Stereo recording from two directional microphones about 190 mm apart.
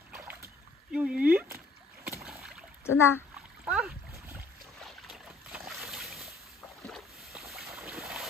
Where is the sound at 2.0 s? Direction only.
15° right (ahead or behind).